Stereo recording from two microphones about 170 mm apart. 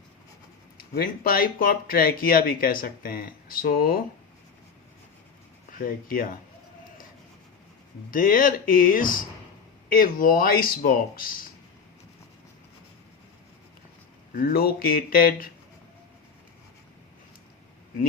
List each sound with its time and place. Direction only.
0.9 s speech: 60° left (ahead or behind)
5.7 s speech: 55° left (ahead or behind)
8.1 s speech: 55° left (ahead or behind)
14.3 s speech: 65° left (ahead or behind)